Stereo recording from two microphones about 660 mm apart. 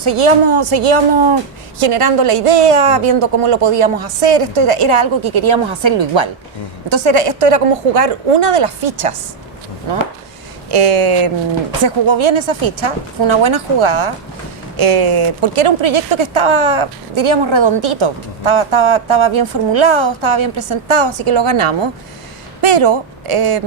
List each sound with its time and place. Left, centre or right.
0.0 s speech: right
10.7 s speech: right